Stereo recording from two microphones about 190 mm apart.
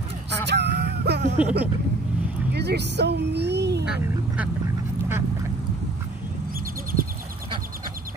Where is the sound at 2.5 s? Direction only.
60° right (ahead or behind).